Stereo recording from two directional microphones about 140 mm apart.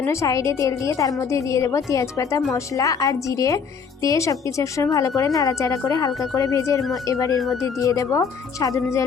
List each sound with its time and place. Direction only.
0.0 s a woman's voice: 20° left (ahead or behind)